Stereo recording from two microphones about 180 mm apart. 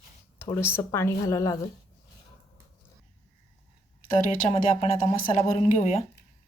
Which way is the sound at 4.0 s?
45° left (ahead or behind).